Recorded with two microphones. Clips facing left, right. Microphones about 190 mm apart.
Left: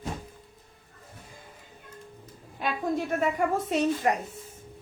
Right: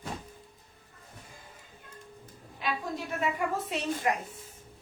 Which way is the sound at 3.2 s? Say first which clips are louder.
Left 1 dB; 45° left (ahead or behind).